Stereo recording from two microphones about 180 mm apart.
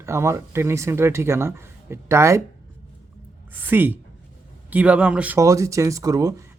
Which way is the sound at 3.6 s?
10° right (ahead or behind).